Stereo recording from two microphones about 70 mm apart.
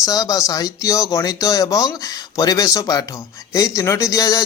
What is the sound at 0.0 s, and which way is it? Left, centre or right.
Speech, left.